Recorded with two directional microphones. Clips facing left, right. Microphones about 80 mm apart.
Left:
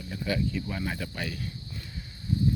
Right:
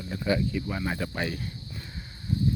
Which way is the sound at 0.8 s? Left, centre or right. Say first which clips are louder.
Right 3 dB; right.